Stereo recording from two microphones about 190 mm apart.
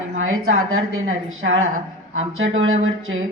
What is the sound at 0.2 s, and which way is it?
A woman's voice, 90° right.